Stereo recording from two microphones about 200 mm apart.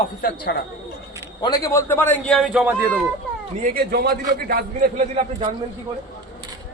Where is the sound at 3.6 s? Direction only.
45° right (ahead or behind).